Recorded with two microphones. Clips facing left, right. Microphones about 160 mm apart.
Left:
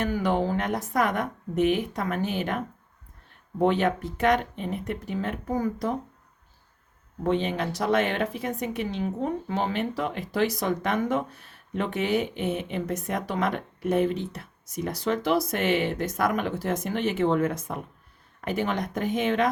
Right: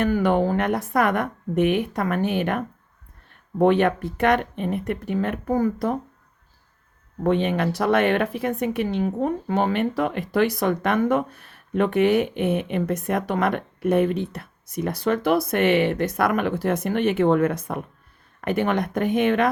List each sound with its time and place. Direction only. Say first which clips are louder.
0.0 s speech: right 5 dB; 60° right (ahead or behind)
7.3 s speech: right 4 dB; 60° right (ahead or behind)